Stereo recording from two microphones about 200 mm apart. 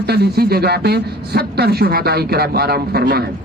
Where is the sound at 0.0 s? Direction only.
55° right (ahead or behind).